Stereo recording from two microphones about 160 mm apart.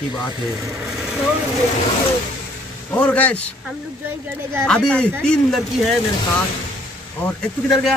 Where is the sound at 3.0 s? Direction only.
10° left (ahead or behind).